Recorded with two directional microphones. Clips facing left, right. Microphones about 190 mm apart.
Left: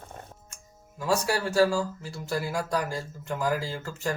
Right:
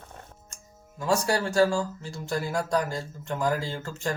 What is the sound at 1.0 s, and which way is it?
Speech, 5° left (ahead or behind).